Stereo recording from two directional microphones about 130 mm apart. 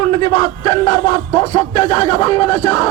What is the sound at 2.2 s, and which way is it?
Speech, 45° left (ahead or behind).